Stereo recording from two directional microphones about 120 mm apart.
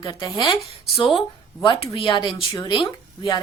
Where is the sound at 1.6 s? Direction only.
45° left (ahead or behind).